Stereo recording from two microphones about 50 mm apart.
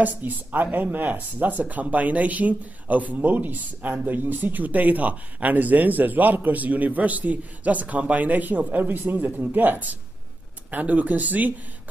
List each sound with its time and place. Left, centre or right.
0.0 s speech: right